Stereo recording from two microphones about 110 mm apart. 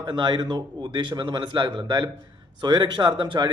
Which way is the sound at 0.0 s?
40° right (ahead or behind).